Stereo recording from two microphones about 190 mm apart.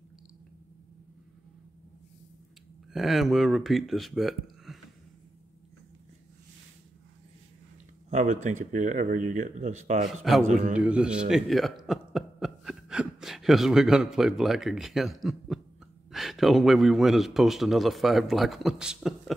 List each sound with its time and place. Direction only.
2.9 s speech: centre (ahead or behind)
8.1 s speech: 40° right (ahead or behind)
10.3 s a man's voice: centre (ahead or behind)